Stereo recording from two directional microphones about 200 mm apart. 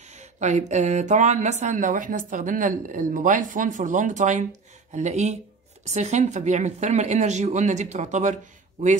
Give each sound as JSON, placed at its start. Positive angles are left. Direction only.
{"t": 0.1, "sound": "speech", "side_deg": -35}